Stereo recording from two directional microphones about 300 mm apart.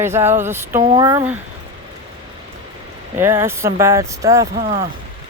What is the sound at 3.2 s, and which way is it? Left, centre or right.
Speech, centre.